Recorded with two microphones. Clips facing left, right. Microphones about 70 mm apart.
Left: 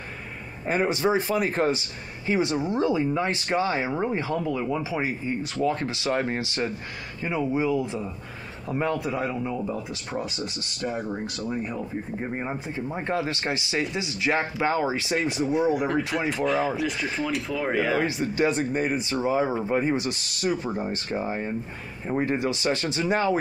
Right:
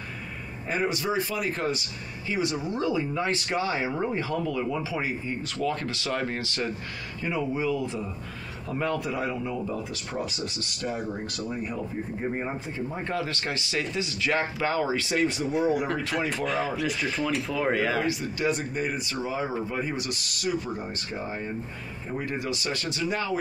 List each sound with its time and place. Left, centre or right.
0.7 s speech: left
12.2 s speech: centre
12.7 s speech: left
15.5 s speech: centre
16.0 s speech: centre
16.4 s speech: centre
18.0 s speech: left
22.1 s speech: left